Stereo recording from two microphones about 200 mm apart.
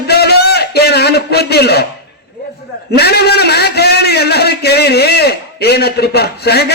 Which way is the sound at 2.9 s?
55° left (ahead or behind).